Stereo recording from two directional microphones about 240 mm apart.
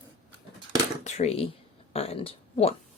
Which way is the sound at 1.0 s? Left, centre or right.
Left.